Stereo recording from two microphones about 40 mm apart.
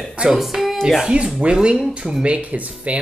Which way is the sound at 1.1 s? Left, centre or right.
Right.